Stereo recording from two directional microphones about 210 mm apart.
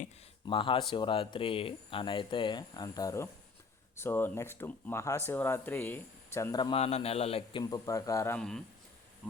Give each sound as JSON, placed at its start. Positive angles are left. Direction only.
{"t": 0.4, "sound": "speech", "side_deg": 25}
{"t": 7.6, "sound": "speech", "side_deg": 15}